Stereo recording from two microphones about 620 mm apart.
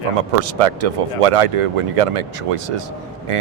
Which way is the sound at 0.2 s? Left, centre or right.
Right.